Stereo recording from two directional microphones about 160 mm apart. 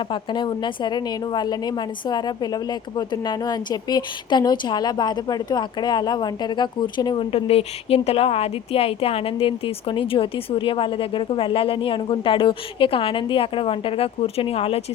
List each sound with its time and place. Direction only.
0.1 s a woman's voice: 30° left (ahead or behind)